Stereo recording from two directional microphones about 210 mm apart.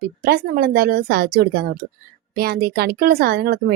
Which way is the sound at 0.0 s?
45° right (ahead or behind).